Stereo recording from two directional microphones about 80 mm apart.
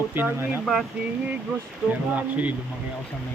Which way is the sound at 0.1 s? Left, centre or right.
Right.